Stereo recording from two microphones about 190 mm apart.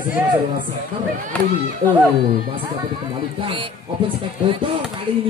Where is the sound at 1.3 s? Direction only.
10° left (ahead or behind).